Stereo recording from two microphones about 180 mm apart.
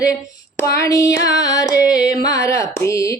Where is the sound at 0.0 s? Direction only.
15° left (ahead or behind).